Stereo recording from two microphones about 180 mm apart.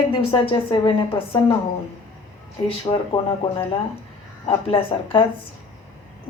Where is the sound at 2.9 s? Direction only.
25° left (ahead or behind).